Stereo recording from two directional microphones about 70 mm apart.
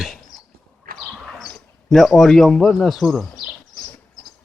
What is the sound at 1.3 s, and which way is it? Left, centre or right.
Speech, centre.